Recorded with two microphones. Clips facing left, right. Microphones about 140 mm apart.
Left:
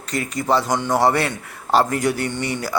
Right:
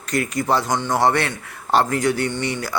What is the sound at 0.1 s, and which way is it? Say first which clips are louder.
Speech: right 3 dB; 45° right (ahead or behind).